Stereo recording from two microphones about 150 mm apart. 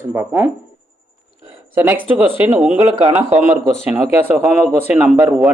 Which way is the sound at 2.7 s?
45° right (ahead or behind).